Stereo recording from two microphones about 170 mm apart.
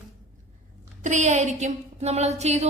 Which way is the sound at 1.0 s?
45° right (ahead or behind).